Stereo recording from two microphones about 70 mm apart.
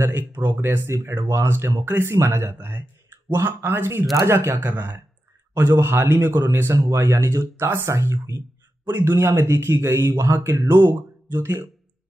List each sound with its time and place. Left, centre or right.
0.0 s speech: right